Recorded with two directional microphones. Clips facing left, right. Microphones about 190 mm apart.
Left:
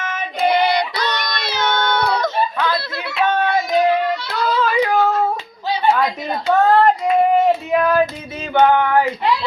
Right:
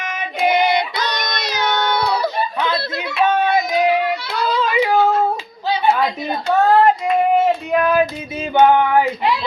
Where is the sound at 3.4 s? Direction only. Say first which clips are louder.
Even; 15° right (ahead or behind).